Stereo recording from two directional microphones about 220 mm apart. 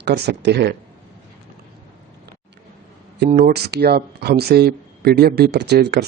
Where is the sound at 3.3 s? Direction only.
40° right (ahead or behind).